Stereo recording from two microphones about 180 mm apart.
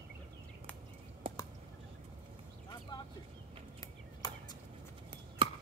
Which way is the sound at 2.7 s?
25° left (ahead or behind).